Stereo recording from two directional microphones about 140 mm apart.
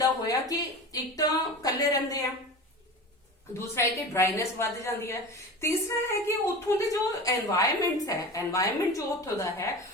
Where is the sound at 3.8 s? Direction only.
20° left (ahead or behind).